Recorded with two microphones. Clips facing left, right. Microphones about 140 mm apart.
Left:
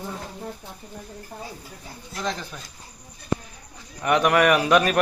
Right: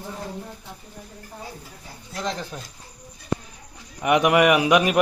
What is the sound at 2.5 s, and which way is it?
Speech, 30° right (ahead or behind).